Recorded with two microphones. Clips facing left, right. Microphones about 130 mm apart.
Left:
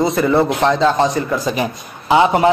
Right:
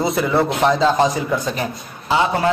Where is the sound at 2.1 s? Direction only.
20° left (ahead or behind).